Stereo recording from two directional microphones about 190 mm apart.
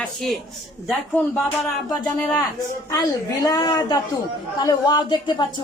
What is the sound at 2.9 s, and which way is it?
Speech, 20° left (ahead or behind).